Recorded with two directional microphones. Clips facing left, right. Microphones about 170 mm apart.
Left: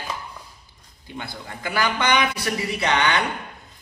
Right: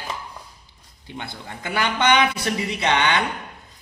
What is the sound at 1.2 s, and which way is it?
A man's voice, 25° right (ahead or behind).